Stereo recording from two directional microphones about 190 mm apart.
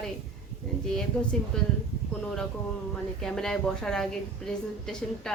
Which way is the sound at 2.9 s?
Centre (ahead or behind).